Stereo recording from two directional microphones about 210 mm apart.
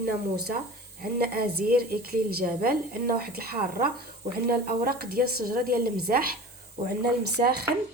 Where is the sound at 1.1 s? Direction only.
45° right (ahead or behind).